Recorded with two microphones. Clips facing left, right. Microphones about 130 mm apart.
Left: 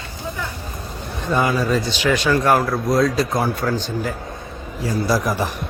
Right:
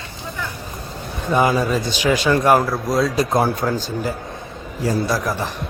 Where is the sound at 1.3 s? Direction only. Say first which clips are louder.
Right 2 dB; 20° right (ahead or behind).